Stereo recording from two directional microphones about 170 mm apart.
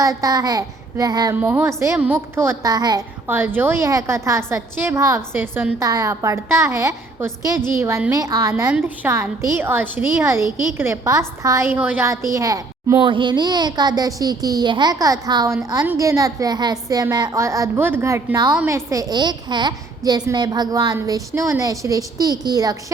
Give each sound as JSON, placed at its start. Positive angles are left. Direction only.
{"t": 0.0, "sound": "a woman's voice", "side_deg": -20}
{"t": 1.4, "sound": "a woman's voice", "side_deg": -10}
{"t": 3.2, "sound": "a woman's voice", "side_deg": -10}